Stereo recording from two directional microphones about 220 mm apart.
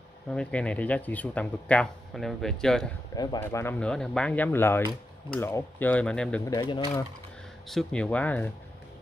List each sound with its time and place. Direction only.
0.3 s speech: 5° left (ahead or behind)
3.2 s speech: 15° left (ahead or behind)
6.5 s speech: 20° left (ahead or behind)
7.6 s speech: 5° left (ahead or behind)